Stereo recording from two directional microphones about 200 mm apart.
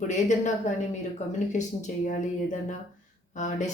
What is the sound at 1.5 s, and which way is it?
A woman's voice, 40° left (ahead or behind).